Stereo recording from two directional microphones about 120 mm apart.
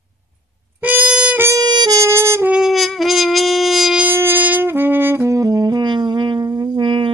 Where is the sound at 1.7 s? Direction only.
40° right (ahead or behind).